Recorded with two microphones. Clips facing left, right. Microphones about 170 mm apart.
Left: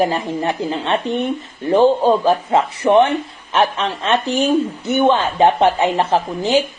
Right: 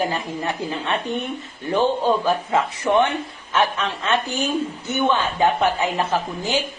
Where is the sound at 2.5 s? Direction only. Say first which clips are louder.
Left 6 dB; 20° left (ahead or behind).